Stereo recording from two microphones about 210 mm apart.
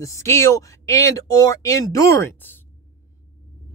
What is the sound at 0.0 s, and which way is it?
Speech, 15° left (ahead or behind).